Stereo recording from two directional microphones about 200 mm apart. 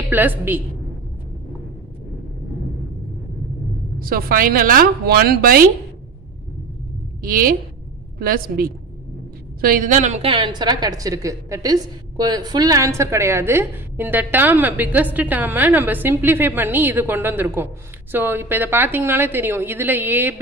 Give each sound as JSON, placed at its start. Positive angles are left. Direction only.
{"t": 0.1, "sound": "a woman's voice", "side_deg": -10}
{"t": 4.0, "sound": "a woman's voice", "side_deg": -45}
{"t": 7.2, "sound": "a woman's voice", "side_deg": -45}